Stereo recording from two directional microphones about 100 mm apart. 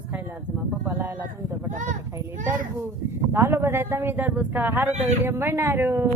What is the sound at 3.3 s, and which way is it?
Speech, 25° right (ahead or behind).